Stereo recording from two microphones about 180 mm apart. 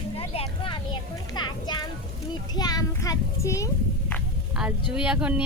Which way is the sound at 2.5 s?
20° left (ahead or behind).